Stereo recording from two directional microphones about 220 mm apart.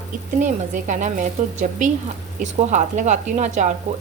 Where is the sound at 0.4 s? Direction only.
35° right (ahead or behind).